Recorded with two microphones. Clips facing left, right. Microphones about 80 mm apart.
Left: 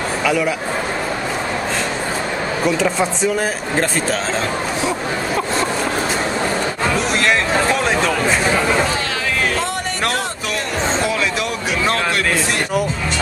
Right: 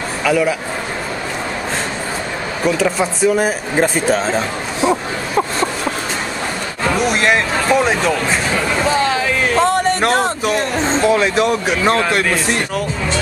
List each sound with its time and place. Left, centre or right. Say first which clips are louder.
2.6 s speech: right 2 dB; centre
9.6 s a man's voice: right 7 dB; right